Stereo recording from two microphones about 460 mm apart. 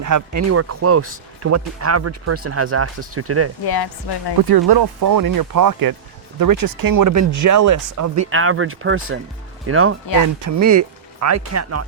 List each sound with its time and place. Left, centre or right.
0.0 s speech: right
3.6 s speech: left
4.4 s speech: right
8.3 s speech: right